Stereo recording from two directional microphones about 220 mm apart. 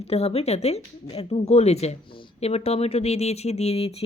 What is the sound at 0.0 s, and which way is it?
Speech, 25° left (ahead or behind).